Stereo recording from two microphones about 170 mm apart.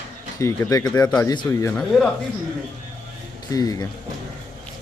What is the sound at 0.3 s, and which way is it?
Speech, 20° left (ahead or behind).